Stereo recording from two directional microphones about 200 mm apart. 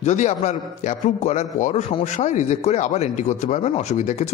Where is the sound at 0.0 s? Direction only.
35° left (ahead or behind).